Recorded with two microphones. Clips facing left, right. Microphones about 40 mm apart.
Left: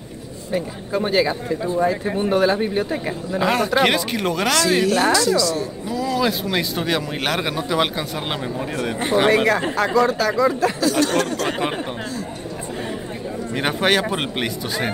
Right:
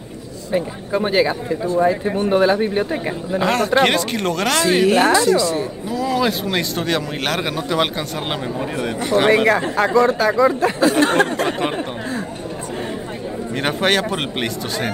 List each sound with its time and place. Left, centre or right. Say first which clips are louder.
0.5 s speech: right 3 dB; centre
3.4 s a man's voice: right 2 dB; centre
4.6 s a woman's voice: right 4 dB; right
6.0 s speech: right 2 dB; centre
6.8 s a man's voice: right 1 dB; centre
10.8 s a sound: right 6 dB; right
13.6 s a man's voice: right 1 dB; centre